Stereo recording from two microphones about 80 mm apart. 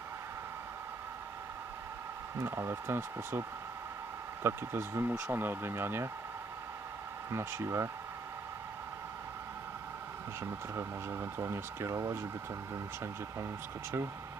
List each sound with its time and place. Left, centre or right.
2.4 s speech: right
4.4 s speech: right
7.3 s speech: right
10.4 s speech: right